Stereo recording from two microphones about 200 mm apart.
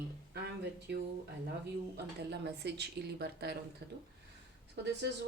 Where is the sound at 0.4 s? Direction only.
55° right (ahead or behind).